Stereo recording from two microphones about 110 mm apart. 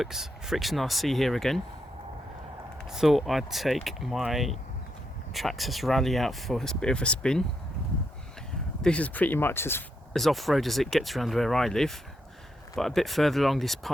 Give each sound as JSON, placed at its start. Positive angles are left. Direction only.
{"t": 0.0, "sound": "speech", "side_deg": -5}
{"t": 2.9, "sound": "speech", "side_deg": -5}
{"t": 8.8, "sound": "speech", "side_deg": 10}
{"t": 10.1, "sound": "speech", "side_deg": 5}